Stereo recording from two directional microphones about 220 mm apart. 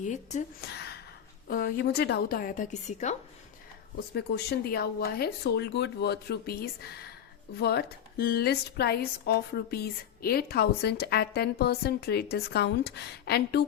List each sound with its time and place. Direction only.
0.0 s a woman's voice: 35° left (ahead or behind)
0.7 s a sound: 45° left (ahead or behind)
1.5 s speech: 45° left (ahead or behind)
4.3 s speech: 45° left (ahead or behind)